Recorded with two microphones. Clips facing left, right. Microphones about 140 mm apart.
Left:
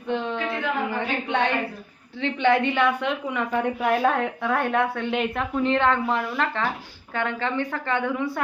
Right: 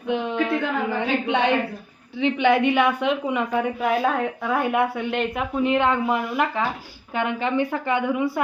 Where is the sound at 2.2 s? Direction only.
15° right (ahead or behind).